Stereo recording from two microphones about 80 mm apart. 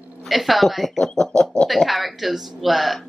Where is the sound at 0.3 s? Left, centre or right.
Centre.